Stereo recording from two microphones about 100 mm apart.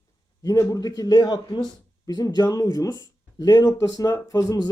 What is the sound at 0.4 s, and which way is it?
Speech, 35° left (ahead or behind).